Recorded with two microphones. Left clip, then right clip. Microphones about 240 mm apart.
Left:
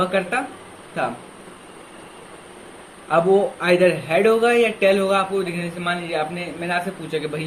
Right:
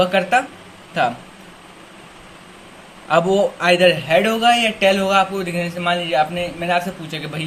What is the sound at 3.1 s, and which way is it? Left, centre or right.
A man's voice, right.